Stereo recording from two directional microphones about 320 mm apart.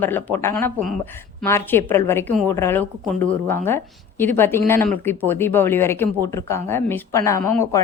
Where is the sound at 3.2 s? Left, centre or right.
Right.